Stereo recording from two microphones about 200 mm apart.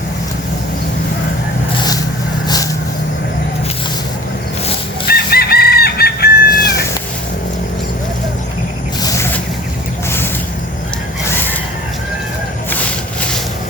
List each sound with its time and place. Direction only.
5.0 s chicken: 50° left (ahead or behind)